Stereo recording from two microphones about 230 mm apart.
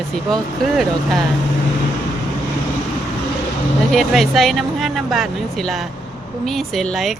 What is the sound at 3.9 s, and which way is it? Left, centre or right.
Speech, centre.